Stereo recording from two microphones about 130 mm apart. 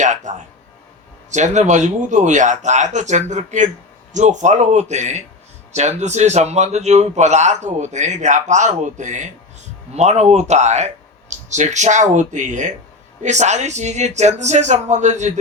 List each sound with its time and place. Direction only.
0.0 s a sound: 70° right (ahead or behind)
1.3 s a man's voice: 65° right (ahead or behind)
9.9 s a man's voice: 60° right (ahead or behind)